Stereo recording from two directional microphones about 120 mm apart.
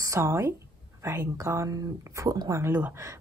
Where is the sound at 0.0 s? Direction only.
25° right (ahead or behind).